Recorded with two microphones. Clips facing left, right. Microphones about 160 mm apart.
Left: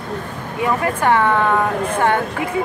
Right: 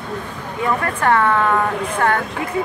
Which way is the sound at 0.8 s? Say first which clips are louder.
Left 1 dB; 15° left (ahead or behind).